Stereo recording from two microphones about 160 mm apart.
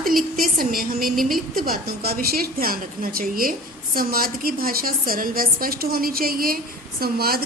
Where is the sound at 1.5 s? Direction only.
65° right (ahead or behind).